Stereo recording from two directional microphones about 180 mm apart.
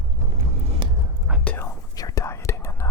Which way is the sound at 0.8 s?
25° right (ahead or behind).